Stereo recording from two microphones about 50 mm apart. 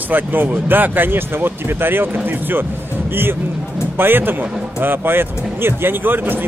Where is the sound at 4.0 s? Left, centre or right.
Right.